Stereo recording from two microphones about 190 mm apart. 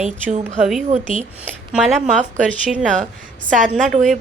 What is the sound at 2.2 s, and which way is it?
Speech, 40° right (ahead or behind).